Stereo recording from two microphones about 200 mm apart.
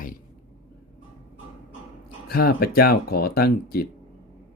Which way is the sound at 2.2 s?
50° left (ahead or behind).